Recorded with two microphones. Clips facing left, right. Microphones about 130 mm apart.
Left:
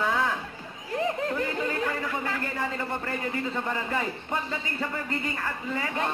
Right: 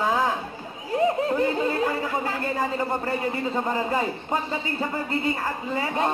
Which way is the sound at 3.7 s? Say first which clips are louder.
Right 6 dB; 25° right (ahead or behind).